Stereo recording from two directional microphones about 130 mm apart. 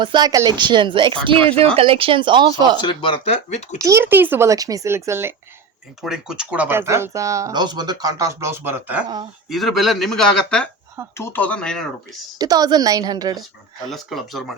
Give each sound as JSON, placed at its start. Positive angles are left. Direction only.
{"t": 0.0, "sound": "speech", "side_deg": -35}
{"t": 2.8, "sound": "speech", "side_deg": 40}
{"t": 3.8, "sound": "speech", "side_deg": -25}
{"t": 4.0, "sound": "speech", "side_deg": -15}
{"t": 6.0, "sound": "speech", "side_deg": -5}
{"t": 9.5, "sound": "a man's voice", "side_deg": 0}
{"t": 12.4, "sound": "speech", "side_deg": -30}
{"t": 13.9, "sound": "a man's voice", "side_deg": 0}